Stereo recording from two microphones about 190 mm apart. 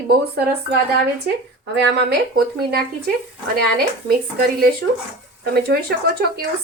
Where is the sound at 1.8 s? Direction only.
55° right (ahead or behind).